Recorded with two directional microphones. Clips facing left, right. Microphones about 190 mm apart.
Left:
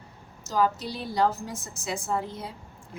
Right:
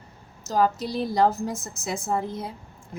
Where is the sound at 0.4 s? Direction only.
45° right (ahead or behind).